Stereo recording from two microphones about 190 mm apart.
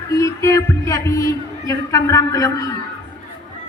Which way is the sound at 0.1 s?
15° left (ahead or behind).